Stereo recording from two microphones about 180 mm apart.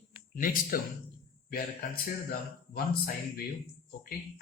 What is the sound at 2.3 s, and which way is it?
Speech, 55° left (ahead or behind).